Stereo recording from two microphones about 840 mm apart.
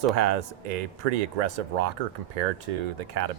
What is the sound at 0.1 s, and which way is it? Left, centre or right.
Speech, right.